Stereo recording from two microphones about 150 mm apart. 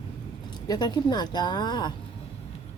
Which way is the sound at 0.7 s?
25° left (ahead or behind).